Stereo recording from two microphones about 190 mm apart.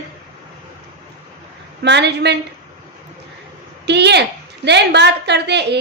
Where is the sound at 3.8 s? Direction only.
60° right (ahead or behind).